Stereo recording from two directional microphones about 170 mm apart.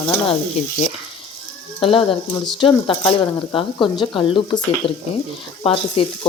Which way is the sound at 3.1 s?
30° left (ahead or behind).